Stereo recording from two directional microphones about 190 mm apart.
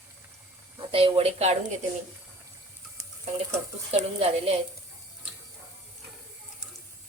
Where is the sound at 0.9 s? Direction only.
30° right (ahead or behind).